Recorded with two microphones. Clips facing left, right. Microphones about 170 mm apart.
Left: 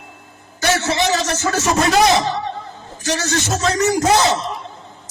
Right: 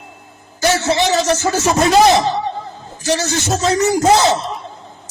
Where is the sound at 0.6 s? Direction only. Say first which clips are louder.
Right 3 dB; 30° right (ahead or behind).